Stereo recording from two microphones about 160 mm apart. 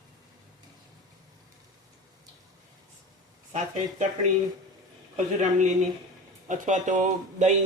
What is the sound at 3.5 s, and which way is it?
Speech, 50° right (ahead or behind).